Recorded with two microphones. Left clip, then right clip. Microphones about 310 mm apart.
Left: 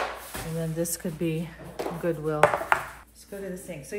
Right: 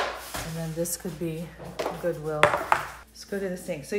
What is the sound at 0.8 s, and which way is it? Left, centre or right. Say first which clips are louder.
Speech: left 2 dB; left.